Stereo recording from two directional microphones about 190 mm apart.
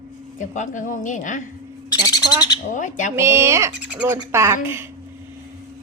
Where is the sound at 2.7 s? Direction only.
40° left (ahead or behind).